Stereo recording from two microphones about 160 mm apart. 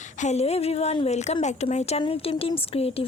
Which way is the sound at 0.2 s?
45° left (ahead or behind).